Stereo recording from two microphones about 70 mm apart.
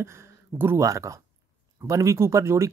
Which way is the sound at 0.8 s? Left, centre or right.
Right.